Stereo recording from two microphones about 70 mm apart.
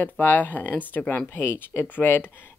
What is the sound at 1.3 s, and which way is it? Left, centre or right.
Speech, left.